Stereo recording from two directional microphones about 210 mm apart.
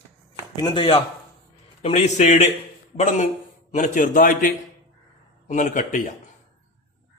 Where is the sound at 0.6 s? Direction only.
20° left (ahead or behind); by 6.0 s 40° left (ahead or behind).